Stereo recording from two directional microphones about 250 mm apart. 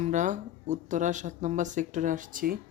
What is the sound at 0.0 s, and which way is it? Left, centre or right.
Speech, right.